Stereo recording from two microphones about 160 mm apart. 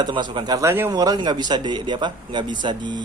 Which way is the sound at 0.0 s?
30° right (ahead or behind).